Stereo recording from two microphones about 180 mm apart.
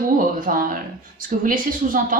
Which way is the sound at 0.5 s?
55° right (ahead or behind).